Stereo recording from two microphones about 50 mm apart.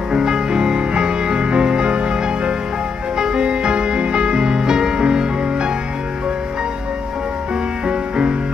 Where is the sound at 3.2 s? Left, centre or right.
Centre.